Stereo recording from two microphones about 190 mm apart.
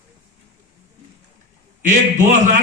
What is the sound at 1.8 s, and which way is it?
Speech, 40° right (ahead or behind).